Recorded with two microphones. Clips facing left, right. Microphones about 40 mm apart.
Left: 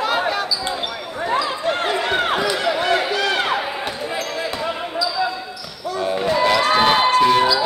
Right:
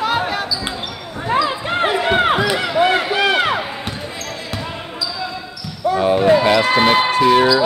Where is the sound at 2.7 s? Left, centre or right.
Right.